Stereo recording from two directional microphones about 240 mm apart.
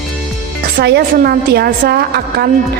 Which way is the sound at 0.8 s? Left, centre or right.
Right.